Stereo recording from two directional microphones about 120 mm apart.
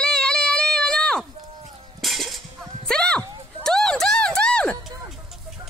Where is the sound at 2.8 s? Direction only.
5° left (ahead or behind).